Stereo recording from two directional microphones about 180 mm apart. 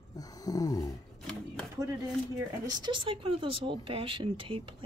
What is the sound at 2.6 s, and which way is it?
Speech, 25° right (ahead or behind).